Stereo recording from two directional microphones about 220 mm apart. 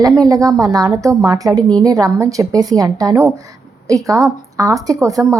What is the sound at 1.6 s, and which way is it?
Speech, 5° left (ahead or behind).